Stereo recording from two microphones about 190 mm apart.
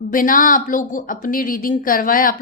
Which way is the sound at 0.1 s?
45° left (ahead or behind).